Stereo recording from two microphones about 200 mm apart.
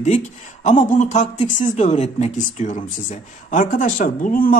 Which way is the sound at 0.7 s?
35° left (ahead or behind).